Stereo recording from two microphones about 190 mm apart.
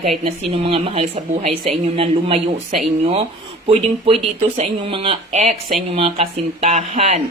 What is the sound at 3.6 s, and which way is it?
Speech, 30° right (ahead or behind).